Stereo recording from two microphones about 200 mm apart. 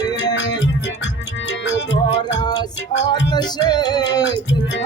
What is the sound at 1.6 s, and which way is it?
Music, 60° left (ahead or behind).